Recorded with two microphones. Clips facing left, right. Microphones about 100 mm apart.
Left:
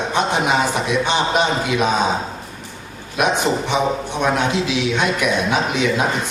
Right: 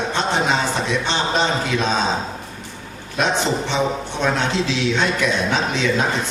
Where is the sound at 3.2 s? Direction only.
15° left (ahead or behind).